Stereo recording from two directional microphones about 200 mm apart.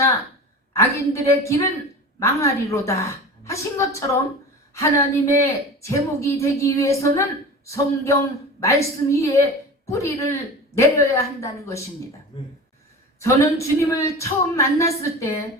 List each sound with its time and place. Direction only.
0.7 s a woman's voice: 15° left (ahead or behind)